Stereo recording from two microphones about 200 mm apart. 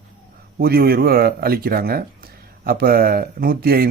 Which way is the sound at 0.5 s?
50° right (ahead or behind).